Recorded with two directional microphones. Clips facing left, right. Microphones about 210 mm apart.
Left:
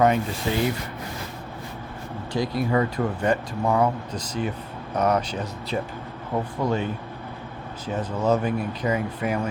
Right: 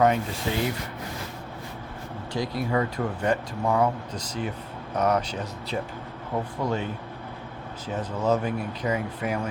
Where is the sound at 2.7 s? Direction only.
5° left (ahead or behind).